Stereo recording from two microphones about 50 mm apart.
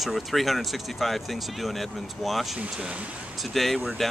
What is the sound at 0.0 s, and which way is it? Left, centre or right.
Speech, centre.